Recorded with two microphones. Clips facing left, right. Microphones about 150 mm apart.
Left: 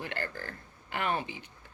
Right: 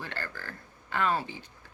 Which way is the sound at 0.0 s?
15° left (ahead or behind).